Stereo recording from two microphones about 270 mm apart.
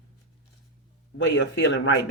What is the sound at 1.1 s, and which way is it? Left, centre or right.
Speech, left.